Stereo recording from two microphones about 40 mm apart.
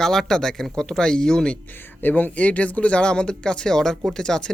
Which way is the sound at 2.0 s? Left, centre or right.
Left.